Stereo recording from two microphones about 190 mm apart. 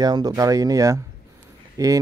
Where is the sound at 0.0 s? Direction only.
20° right (ahead or behind).